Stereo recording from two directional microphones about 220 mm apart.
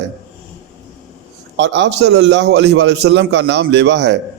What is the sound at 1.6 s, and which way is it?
A man's voice, 55° right (ahead or behind).